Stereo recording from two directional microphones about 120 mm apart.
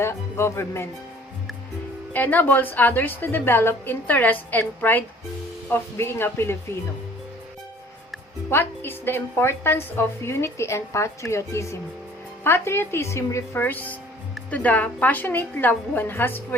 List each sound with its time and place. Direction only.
0.0 s speech: 20° left (ahead or behind)
2.1 s a woman's voice: 15° left (ahead or behind)
8.4 s a woman's voice: 20° left (ahead or behind)